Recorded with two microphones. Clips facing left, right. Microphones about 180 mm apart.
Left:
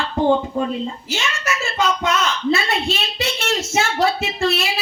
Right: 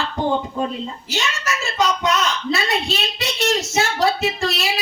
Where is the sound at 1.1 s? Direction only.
35° right (ahead or behind).